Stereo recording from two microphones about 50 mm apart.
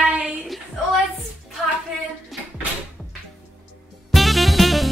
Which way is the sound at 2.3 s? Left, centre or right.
Centre.